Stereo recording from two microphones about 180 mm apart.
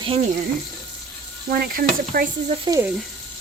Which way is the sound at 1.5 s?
55° right (ahead or behind).